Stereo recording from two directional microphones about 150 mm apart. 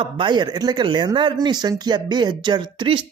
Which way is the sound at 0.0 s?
30° right (ahead or behind).